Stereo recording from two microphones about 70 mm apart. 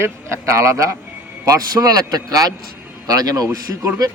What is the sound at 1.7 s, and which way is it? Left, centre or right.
A man's voice, right.